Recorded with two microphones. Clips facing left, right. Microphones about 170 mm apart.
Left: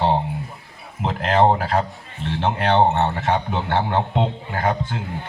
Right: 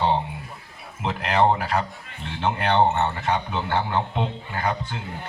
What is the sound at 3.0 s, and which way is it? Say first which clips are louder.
A man's voice: left 3 dB; 60° left (ahead or behind).